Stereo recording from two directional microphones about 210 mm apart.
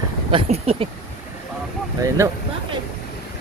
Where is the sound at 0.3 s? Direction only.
30° right (ahead or behind).